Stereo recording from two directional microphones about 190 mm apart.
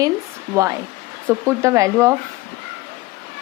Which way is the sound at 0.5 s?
15° right (ahead or behind).